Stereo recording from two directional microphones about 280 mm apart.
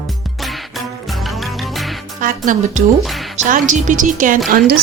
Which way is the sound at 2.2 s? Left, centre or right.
Right.